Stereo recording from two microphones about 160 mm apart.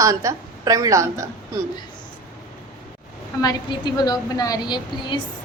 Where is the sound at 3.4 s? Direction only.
25° left (ahead or behind).